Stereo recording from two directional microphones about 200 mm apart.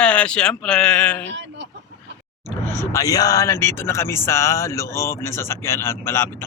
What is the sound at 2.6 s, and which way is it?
A man's voice, 10° left (ahead or behind).